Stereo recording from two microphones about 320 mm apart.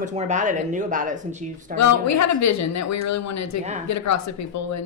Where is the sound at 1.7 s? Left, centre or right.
Left.